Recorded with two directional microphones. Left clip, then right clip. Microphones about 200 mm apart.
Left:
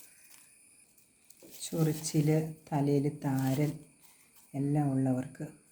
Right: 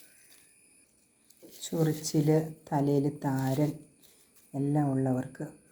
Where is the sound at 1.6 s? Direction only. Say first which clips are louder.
Right 3 dB; 5° right (ahead or behind).